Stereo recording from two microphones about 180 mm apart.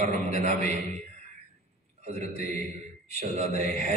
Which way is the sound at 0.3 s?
40° right (ahead or behind).